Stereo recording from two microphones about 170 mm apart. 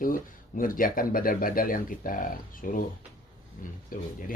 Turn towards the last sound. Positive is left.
turn(degrees=55)  # may be behind; listen again after turning